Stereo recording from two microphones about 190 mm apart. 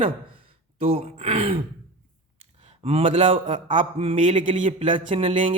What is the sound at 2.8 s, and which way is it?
Speech, 30° right (ahead or behind).